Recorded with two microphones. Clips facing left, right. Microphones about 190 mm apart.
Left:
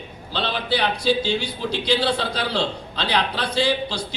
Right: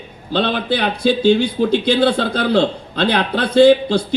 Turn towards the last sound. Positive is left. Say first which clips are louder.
# right 12 dB
turn(degrees=-55)  # may be behind; listen again after turning